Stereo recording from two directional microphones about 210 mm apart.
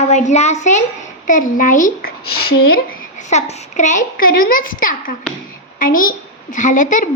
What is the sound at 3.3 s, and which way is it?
A woman's voice, 35° left (ahead or behind).